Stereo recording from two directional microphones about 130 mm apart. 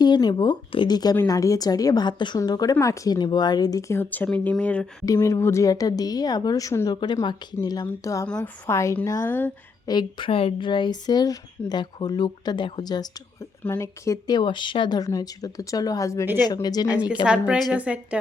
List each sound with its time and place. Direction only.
0.0 s a woman's voice: 35° left (ahead or behind); by 4.9 s 10° left (ahead or behind)
5.0 s a woman's voice: 25° left (ahead or behind)
9.8 s a woman's voice: 30° left (ahead or behind)
16.9 s a woman's voice: 10° right (ahead or behind)